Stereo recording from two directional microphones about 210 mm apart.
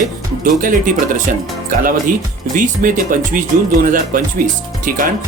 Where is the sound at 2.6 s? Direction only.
40° right (ahead or behind).